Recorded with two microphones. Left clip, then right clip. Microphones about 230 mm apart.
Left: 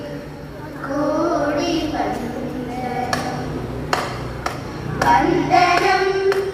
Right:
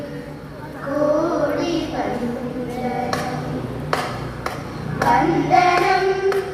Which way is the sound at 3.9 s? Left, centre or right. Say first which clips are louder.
Left 1 dB; left.